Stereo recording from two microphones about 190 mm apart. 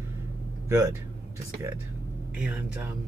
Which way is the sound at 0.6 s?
15° right (ahead or behind).